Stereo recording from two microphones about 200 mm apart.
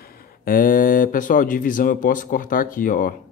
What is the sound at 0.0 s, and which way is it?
Speech, 45° left (ahead or behind).